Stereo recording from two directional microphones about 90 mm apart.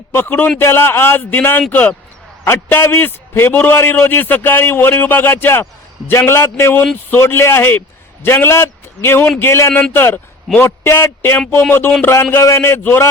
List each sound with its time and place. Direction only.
0.1 s a man's voice: 25° left (ahead or behind)